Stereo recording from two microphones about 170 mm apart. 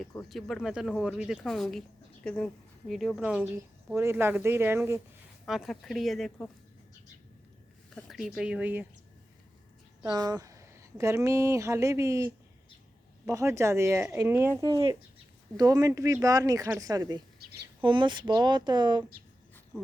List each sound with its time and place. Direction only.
0.3 s a woman's voice: centre (ahead or behind); by 4.9 s 15° right (ahead or behind)
5.5 s speech: centre (ahead or behind)
7.9 s speech: centre (ahead or behind)
10.1 s a woman's voice: 20° right (ahead or behind)
17.4 s a sound: 70° right (ahead or behind)
17.8 s speech: 30° right (ahead or behind)
19.7 s a sound: centre (ahead or behind)